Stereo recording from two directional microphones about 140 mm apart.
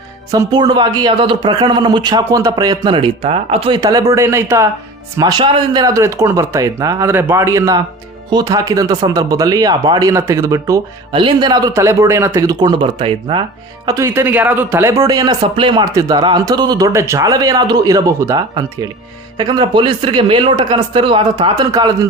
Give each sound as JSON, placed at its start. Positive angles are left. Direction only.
{"t": 0.3, "sound": "speech", "side_deg": -25}
{"t": 3.8, "sound": "speech", "side_deg": -25}
{"t": 11.1, "sound": "speech", "side_deg": -35}
{"t": 13.8, "sound": "a man's voice", "side_deg": -20}
{"t": 15.5, "sound": "speech", "side_deg": -35}
{"t": 15.8, "sound": "speech", "side_deg": -25}